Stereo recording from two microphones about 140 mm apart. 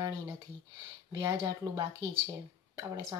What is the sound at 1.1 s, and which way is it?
Speech, 30° right (ahead or behind).